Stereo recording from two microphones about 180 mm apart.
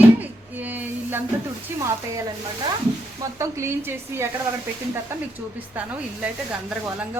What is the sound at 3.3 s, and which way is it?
Speech, 15° right (ahead or behind).